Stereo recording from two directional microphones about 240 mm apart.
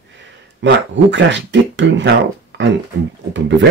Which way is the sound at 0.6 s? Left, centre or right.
Right.